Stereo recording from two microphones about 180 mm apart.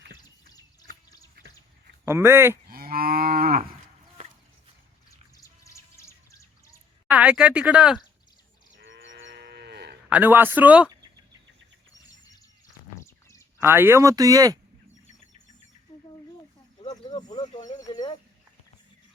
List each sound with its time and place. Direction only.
0.2 s music: 20° left (ahead or behind)
2.0 s speech: 15° right (ahead or behind)
2.6 s moo: 55° right (ahead or behind)
5.4 s bird: 15° left (ahead or behind)
7.1 s speech: 5° right (ahead or behind)
8.8 s livestock: 90° right
9.2 s moo: 65° right (ahead or behind)
10.1 s speech: 10° right (ahead or behind)
11.0 s bird: 25° right (ahead or behind)
13.6 s speech: 15° right (ahead or behind)
16.8 s a sound: 25° left (ahead or behind)